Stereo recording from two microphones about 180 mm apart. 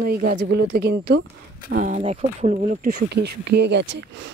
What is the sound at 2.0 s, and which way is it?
Speech, 35° right (ahead or behind).